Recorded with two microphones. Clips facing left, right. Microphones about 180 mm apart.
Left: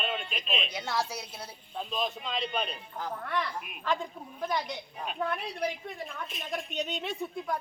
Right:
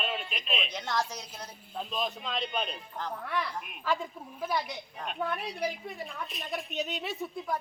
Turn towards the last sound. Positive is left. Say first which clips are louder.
# left 1 dB
turn(degrees=0)  # may be behind; listen again after turning